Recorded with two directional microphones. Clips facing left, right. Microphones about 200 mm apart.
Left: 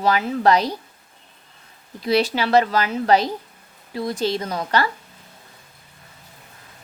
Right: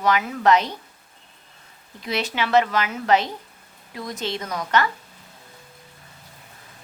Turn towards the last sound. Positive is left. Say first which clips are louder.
# left 1 dB
turn(degrees=30)  # may be behind; listen again after turning